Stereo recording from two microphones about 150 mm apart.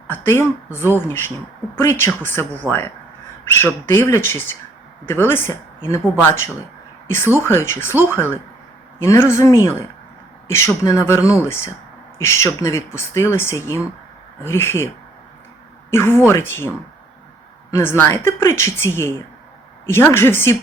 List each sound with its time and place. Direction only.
0.1 s speech: 15° left (ahead or behind)
15.9 s speech: 15° left (ahead or behind)